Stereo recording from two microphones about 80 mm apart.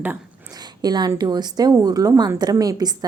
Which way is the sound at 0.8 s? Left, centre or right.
Right.